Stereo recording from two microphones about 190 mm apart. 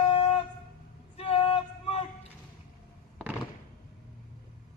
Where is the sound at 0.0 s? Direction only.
30° left (ahead or behind).